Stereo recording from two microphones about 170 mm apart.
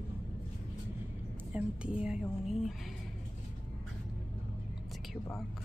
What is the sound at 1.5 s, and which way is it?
Speech, 5° right (ahead or behind).